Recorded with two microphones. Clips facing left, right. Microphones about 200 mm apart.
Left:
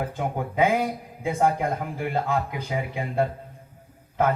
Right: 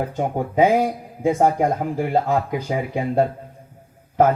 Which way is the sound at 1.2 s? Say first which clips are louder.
Right 6 dB; 50° right (ahead or behind).